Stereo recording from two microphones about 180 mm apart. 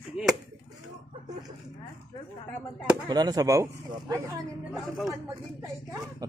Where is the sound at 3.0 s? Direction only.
20° right (ahead or behind).